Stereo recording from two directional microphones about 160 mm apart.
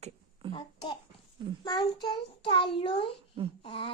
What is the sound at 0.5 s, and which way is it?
A child's voice, 30° left (ahead or behind).